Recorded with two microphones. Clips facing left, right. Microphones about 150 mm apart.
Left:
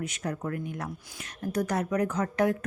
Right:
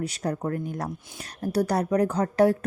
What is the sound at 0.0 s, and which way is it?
A woman's voice, 35° right (ahead or behind).